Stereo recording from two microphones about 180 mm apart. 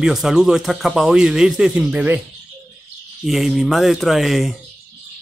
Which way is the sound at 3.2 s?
Centre (ahead or behind).